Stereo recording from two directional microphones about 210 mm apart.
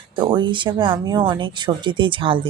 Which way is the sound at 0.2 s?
20° right (ahead or behind).